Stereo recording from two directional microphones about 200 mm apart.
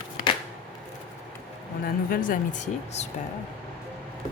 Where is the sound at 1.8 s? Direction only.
45° left (ahead or behind).